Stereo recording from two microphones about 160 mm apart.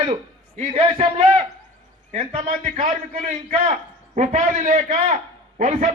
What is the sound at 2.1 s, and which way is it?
A man's voice, 50° right (ahead or behind).